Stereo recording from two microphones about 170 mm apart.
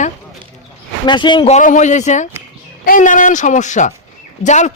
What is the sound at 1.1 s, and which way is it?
Speech, 25° left (ahead or behind).